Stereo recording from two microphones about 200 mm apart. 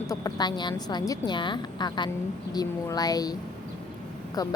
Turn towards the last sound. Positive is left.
turn(degrees=20)  # may be behind; listen again after turning